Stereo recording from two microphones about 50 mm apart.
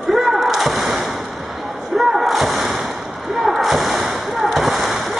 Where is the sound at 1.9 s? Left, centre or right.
Centre.